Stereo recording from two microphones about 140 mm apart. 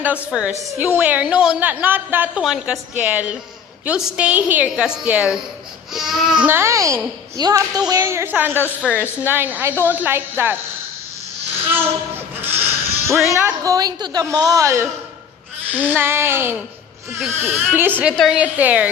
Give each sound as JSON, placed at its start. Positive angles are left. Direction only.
{"t": 0.0, "sound": "a woman's voice", "side_deg": -10}
{"t": 6.5, "sound": "a woman's voice", "side_deg": -20}
{"t": 11.7, "sound": "a sound", "side_deg": -15}
{"t": 13.3, "sound": "a woman's voice", "side_deg": -20}